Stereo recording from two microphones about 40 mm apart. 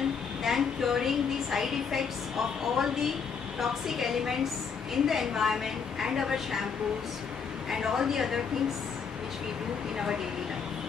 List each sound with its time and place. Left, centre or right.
0.4 s a woman's voice: centre
7.7 s a woman's voice: centre